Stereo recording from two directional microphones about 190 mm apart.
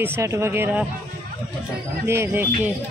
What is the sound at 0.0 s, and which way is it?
Speech, 15° right (ahead or behind).